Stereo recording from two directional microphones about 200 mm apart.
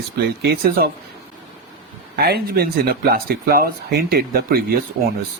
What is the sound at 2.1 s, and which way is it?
Speech, 50° right (ahead or behind).